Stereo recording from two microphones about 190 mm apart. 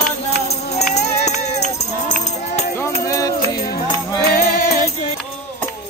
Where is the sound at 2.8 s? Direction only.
15° left (ahead or behind).